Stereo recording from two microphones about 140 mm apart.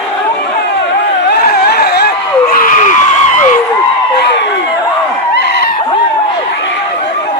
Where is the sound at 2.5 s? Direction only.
80° left.